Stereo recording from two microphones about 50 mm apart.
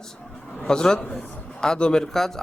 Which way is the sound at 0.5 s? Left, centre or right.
Centre.